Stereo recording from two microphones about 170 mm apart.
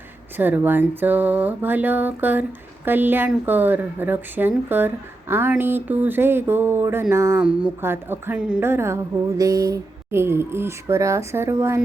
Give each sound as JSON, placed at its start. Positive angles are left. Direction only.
{"t": 0.3, "sound": "speech", "side_deg": -10}